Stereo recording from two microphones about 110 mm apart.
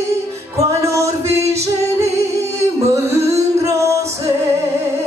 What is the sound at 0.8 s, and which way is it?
Music, 25° right (ahead or behind).